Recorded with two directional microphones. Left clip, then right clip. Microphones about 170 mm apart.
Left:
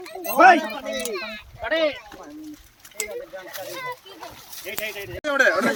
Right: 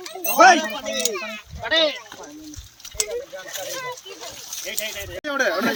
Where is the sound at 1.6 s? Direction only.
35° left (ahead or behind).